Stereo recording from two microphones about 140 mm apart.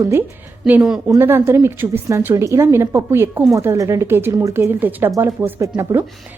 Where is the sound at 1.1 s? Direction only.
20° right (ahead or behind).